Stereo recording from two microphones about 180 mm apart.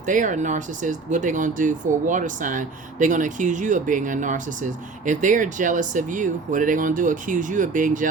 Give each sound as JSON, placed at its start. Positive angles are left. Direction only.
{"t": 0.0, "sound": "speech", "side_deg": -45}